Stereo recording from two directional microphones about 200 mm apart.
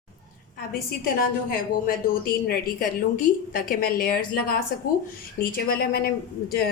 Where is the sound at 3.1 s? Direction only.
45° left (ahead or behind).